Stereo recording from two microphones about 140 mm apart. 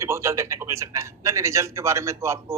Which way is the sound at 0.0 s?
20° right (ahead or behind).